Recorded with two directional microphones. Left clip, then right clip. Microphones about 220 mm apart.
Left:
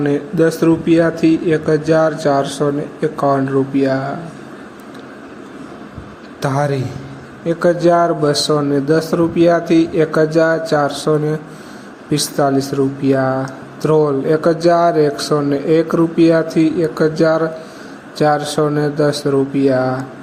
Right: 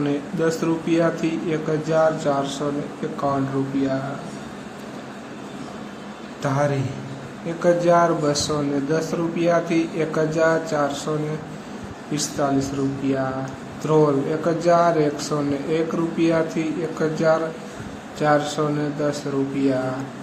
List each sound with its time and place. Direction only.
0.1 s speech: 20° left (ahead or behind)
6.4 s speech: 25° left (ahead or behind)